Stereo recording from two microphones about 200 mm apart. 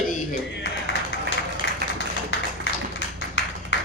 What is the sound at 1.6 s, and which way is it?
Music, 55° left (ahead or behind).